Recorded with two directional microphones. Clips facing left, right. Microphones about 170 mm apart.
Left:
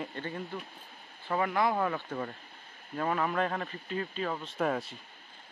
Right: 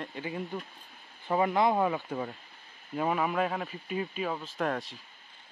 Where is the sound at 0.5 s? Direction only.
20° right (ahead or behind); by 4.9 s centre (ahead or behind).